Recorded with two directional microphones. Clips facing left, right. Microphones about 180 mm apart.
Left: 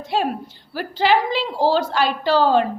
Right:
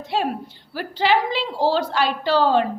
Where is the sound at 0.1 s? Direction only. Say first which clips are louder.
Left 2 dB; 45° left (ahead or behind).